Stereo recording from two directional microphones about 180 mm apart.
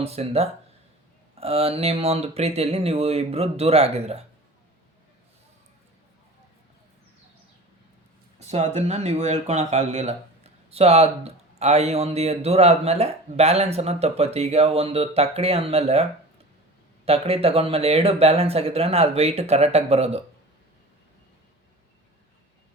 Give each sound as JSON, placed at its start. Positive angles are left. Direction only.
{"t": 0.0, "sound": "speech", "side_deg": -35}
{"t": 8.4, "sound": "speech", "side_deg": -35}
{"t": 17.1, "sound": "speech", "side_deg": -35}